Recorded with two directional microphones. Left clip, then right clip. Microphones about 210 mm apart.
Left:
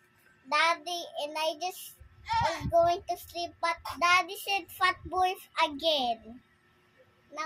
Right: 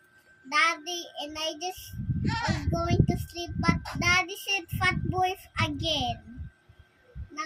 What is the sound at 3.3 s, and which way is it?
Child singing, 15° left (ahead or behind).